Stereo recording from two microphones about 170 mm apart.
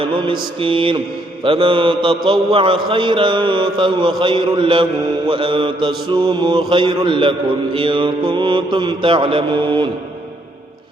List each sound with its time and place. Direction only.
0.0 s mantra: 30° right (ahead or behind)
1.5 s a man's voice: 30° right (ahead or behind)